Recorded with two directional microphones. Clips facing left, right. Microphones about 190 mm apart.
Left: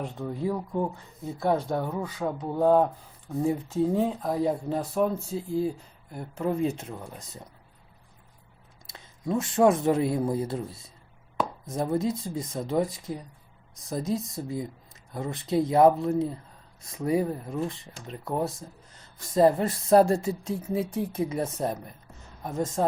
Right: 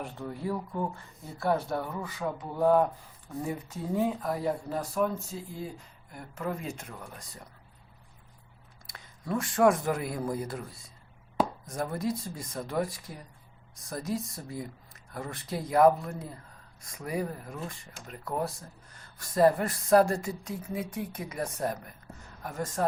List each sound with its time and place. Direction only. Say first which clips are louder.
0.0 s speech: left 5 dB; 20° left (ahead or behind)
8.9 s speech: left 4 dB; 20° left (ahead or behind)
11.7 s speech: left 5 dB; 20° left (ahead or behind)